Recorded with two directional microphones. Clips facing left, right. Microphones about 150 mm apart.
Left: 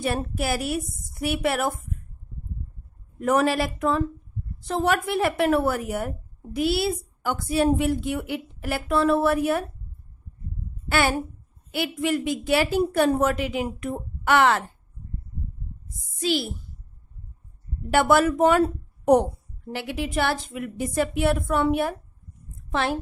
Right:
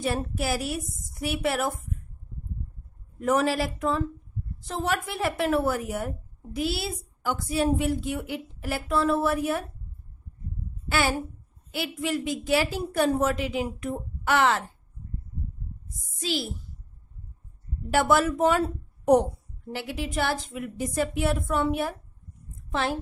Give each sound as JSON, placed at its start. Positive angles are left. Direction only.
{"t": 0.0, "sound": "a woman's voice", "side_deg": 60}
{"t": 3.2, "sound": "a woman's voice", "side_deg": 60}
{"t": 10.9, "sound": "a child's voice", "side_deg": 60}
{"t": 16.2, "sound": "a child's voice", "side_deg": 60}
{"t": 17.9, "sound": "a woman's voice", "side_deg": 60}
{"t": 19.7, "sound": "a woman's voice", "side_deg": 65}